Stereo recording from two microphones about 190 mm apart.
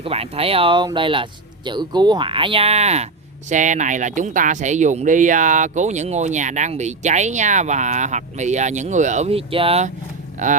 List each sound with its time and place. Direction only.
0.0 s speech: 30° right (ahead or behind)
10.4 s speech: 40° right (ahead or behind)